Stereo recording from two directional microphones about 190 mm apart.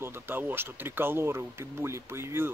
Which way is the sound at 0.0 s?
10° right (ahead or behind).